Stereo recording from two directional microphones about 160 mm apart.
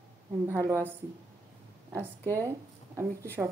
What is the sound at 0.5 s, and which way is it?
Speech, 20° right (ahead or behind).